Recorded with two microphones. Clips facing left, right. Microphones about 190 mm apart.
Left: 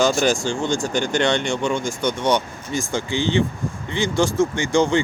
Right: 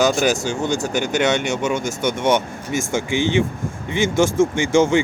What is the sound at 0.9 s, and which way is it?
Speech, 5° right (ahead or behind).